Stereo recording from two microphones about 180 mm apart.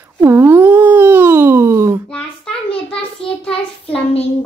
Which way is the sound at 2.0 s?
5° left (ahead or behind).